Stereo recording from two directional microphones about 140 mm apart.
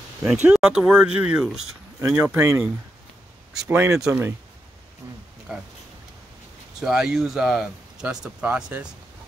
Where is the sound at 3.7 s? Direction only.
15° right (ahead or behind).